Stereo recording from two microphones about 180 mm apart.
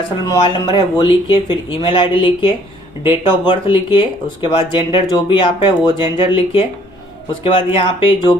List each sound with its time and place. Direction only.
0.3 s speech: 25° left (ahead or behind)
7.8 s speech: 30° left (ahead or behind)